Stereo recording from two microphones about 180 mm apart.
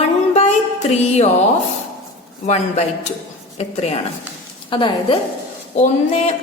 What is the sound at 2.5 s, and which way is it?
A woman's voice, 40° left (ahead or behind).